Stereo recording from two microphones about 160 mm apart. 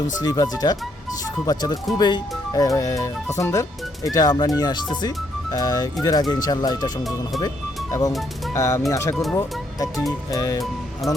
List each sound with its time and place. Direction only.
0.2 s speech: 25° left (ahead or behind)
8.5 s speech: 20° left (ahead or behind)